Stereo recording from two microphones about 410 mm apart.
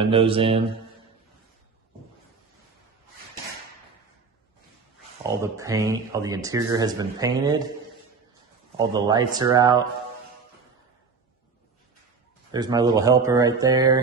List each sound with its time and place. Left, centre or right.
0.0 s speech: centre
5.4 s speech: centre
8.7 s speech: centre
12.4 s speech: centre